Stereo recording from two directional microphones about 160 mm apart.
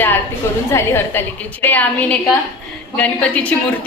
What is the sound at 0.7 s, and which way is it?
A woman's voice, 15° left (ahead or behind).